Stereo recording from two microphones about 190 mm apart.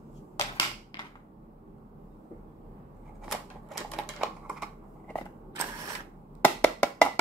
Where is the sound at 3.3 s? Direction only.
Centre (ahead or behind).